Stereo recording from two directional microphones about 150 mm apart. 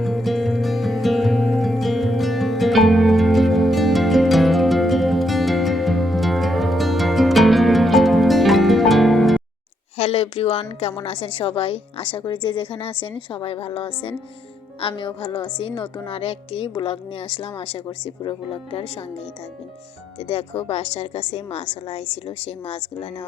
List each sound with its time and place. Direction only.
0.0 s music: centre (ahead or behind)
10.0 s a woman's voice: 40° left (ahead or behind)
20.1 s a woman's voice: 40° left (ahead or behind)